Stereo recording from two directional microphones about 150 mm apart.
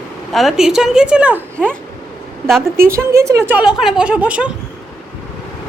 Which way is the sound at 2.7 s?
15° right (ahead or behind).